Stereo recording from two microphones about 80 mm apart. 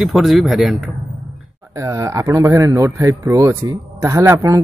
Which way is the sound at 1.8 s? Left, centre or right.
Right.